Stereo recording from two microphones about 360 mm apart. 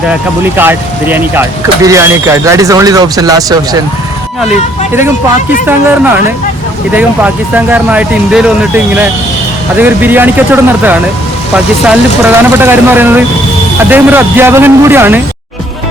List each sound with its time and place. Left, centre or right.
0.5 s speech: centre
6.9 s speech: centre
9.8 s speech: centre